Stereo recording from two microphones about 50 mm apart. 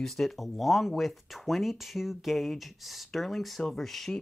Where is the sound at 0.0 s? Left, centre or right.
Centre.